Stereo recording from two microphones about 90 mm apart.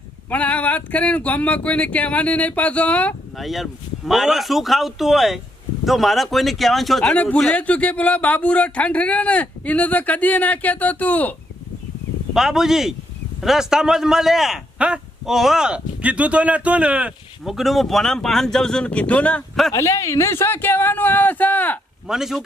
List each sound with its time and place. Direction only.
0.3 s speech: 15° left (ahead or behind)
3.3 s speech: centre (ahead or behind)
7.1 s speech: 15° left (ahead or behind)
12.3 s speech: 5° right (ahead or behind)
14.8 s speech: 15° right (ahead or behind)
17.5 s speech: centre (ahead or behind); by 19.4 s 15° left (ahead or behind)
19.7 s speech: 35° left (ahead or behind); by 21.8 s 20° left (ahead or behind)
22.0 s speech: 5° right (ahead or behind)